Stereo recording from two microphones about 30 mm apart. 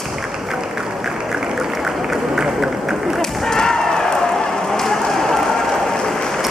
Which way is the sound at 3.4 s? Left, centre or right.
Centre.